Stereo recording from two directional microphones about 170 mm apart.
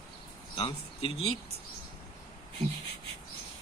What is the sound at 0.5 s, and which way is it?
Speech, 30° left (ahead or behind).